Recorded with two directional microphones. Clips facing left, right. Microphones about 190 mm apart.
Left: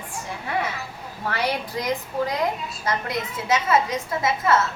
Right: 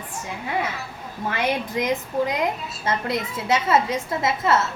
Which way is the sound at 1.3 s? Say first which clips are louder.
Right 2 dB; 20° right (ahead or behind).